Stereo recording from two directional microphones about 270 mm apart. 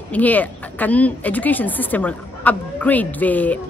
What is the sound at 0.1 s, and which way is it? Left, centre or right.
Speech, centre.